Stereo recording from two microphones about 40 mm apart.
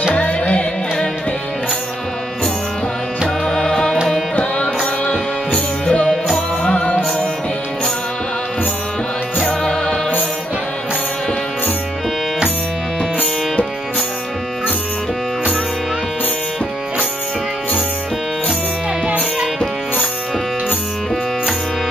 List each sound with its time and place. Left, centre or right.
0.1 s music: left
3.4 s music: centre
5.0 s music: left
9.5 s music: centre